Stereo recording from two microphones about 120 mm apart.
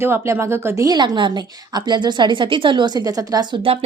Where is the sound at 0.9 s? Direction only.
40° right (ahead or behind).